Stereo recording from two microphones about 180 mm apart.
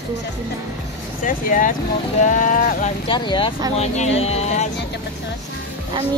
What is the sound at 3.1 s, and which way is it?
Speech, 25° left (ahead or behind).